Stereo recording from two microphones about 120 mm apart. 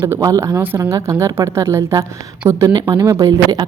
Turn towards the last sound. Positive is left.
turn(degrees=-30)  # may be behind; listen again after turning